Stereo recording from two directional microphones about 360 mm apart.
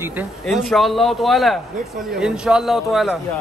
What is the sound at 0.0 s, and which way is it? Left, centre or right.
A man's voice, centre.